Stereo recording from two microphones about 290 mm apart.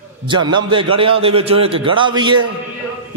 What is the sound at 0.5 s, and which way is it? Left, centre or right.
A man's voice, centre.